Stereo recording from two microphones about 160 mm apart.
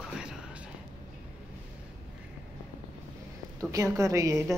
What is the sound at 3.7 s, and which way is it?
Speech, 20° right (ahead or behind).